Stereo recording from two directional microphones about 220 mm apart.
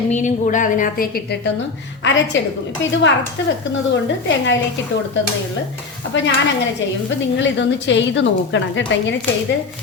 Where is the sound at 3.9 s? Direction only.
55° left (ahead or behind).